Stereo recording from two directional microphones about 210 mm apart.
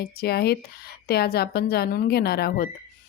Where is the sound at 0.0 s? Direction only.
50° left (ahead or behind).